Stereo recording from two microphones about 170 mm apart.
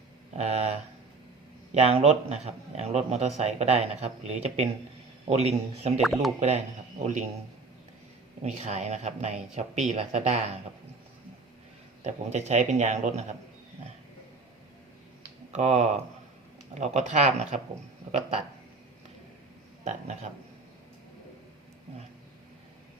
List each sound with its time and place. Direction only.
0.3 s a man's voice: 40° right (ahead or behind)
8.4 s a man's voice: 40° right (ahead or behind)
12.0 s a man's voice: 40° right (ahead or behind)
15.5 s a man's voice: 40° right (ahead or behind)
19.8 s a man's voice: 40° right (ahead or behind)